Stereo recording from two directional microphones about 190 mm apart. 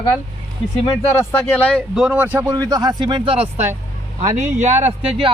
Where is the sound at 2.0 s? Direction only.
10° right (ahead or behind).